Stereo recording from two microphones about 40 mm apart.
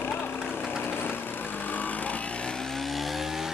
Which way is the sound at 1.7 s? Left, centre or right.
Left.